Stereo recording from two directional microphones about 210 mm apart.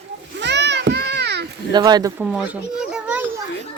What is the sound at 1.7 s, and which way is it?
Speech, 20° right (ahead or behind).